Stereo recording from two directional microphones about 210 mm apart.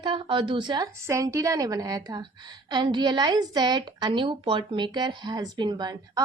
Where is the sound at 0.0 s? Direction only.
20° right (ahead or behind).